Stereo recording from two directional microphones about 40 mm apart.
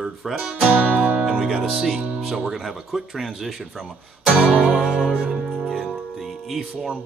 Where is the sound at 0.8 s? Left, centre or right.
Right.